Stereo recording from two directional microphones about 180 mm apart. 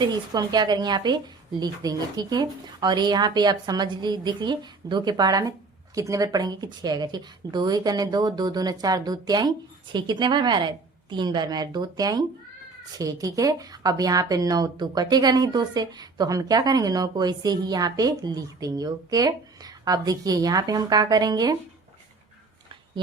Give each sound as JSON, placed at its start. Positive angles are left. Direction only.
{"t": 0.0, "sound": "speech", "side_deg": -25}